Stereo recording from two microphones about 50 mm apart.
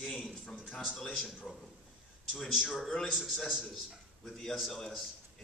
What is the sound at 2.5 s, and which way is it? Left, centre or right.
Speech, centre.